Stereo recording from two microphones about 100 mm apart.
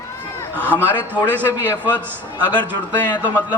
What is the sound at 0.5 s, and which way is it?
Speech, 20° right (ahead or behind).